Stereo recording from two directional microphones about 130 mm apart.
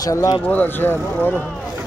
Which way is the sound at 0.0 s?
25° left (ahead or behind).